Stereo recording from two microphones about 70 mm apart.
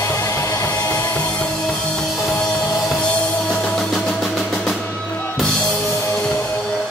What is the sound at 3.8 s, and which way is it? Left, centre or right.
Music, centre.